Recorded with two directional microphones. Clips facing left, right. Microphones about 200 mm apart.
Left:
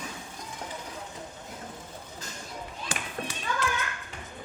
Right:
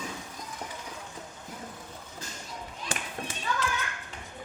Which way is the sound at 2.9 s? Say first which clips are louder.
Right 1 dB; 55° right (ahead or behind).